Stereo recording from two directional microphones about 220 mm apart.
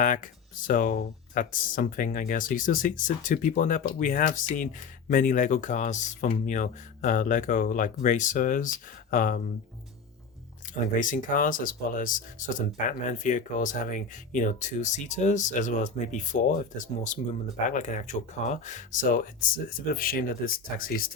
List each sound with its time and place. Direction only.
0.0 s speech: 35° left (ahead or behind)
11.0 s speech: 35° left (ahead or behind)